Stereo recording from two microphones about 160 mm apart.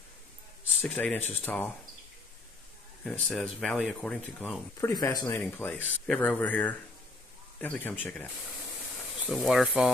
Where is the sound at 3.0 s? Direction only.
5° left (ahead or behind).